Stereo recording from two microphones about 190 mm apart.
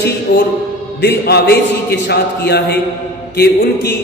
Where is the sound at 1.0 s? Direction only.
60° left (ahead or behind).